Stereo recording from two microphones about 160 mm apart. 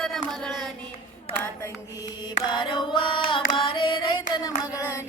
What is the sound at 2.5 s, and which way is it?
Carnatic music, 30° left (ahead or behind).